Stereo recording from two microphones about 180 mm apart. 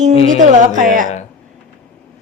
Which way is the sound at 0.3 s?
45° right (ahead or behind).